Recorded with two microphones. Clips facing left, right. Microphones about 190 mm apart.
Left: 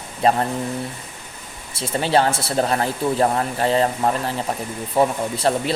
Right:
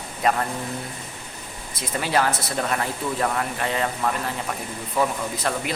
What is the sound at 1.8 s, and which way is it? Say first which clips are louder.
Speech: left 5 dB; 30° left (ahead or behind).